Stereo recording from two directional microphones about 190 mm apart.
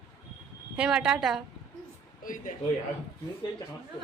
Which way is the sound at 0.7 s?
5° right (ahead or behind).